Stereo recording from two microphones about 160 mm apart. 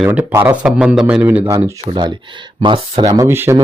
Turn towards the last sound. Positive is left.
turn(degrees=-15)  # may be behind; listen again after turning